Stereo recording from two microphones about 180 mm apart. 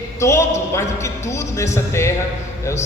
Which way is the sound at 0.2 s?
15° left (ahead or behind).